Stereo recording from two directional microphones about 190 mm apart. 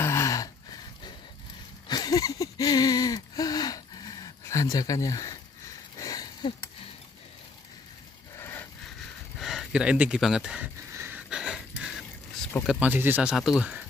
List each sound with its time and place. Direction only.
0.0 s gasp: 15° left (ahead or behind)
1.9 s a sound: 20° left (ahead or behind)
8.4 s a sound: 15° left (ahead or behind)
9.4 s speech: centre (ahead or behind)
11.0 s wheeze: 10° right (ahead or behind)
12.6 s speech: 10° right (ahead or behind)